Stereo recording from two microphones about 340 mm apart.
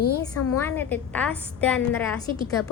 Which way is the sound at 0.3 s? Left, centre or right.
Left.